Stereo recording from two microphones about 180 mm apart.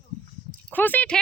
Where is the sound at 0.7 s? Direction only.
10° left (ahead or behind).